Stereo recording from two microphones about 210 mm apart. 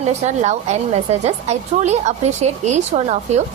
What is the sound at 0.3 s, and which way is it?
A woman's voice, 35° right (ahead or behind).